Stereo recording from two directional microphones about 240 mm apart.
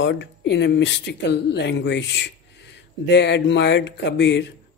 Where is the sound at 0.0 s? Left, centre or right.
Left.